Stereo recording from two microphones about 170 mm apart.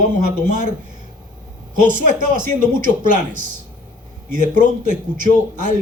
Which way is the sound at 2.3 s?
50° right (ahead or behind).